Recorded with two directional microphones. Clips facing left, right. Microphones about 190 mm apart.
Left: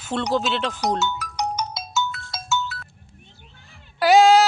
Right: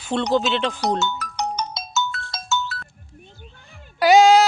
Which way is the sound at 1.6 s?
10° left (ahead or behind).